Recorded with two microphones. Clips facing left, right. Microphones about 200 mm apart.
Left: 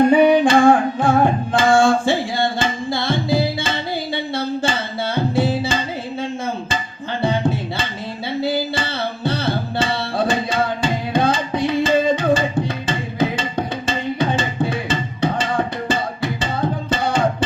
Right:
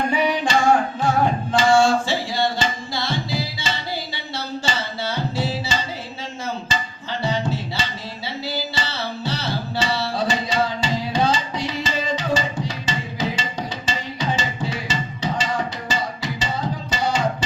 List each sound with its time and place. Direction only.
0.1 s singing: 55° left (ahead or behind)
7.2 s music: 55° left (ahead or behind)
8.4 s tabla: 55° left (ahead or behind)